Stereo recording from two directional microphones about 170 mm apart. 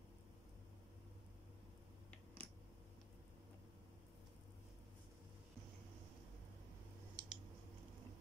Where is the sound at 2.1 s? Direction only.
10° left (ahead or behind).